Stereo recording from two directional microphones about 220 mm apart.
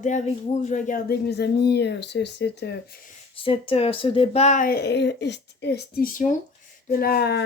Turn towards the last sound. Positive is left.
turn(degrees=45)  # may be behind; listen again after turning